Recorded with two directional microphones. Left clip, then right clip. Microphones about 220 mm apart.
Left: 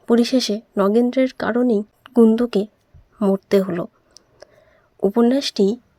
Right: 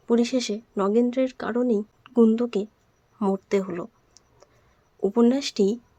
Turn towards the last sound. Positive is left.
turn(degrees=20)  # may be behind; listen again after turning